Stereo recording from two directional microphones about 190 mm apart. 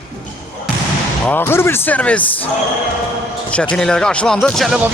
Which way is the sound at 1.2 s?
10° left (ahead or behind).